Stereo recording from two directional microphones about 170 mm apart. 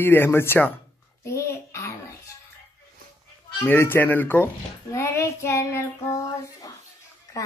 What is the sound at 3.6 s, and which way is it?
Speech, 10° left (ahead or behind).